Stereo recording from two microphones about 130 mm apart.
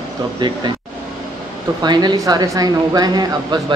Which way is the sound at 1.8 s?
35° right (ahead or behind).